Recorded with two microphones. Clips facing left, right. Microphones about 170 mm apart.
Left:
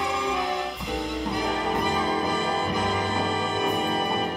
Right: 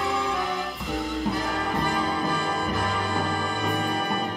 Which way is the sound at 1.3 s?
20° left (ahead or behind).